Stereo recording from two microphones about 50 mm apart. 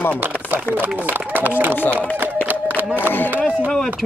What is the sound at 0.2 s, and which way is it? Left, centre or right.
Speech, right.